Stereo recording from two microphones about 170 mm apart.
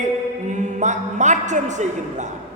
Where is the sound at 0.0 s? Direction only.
45° right (ahead or behind).